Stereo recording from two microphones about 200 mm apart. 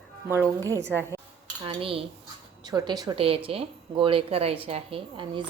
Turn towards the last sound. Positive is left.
turn(degrees=-25)  # may be behind; listen again after turning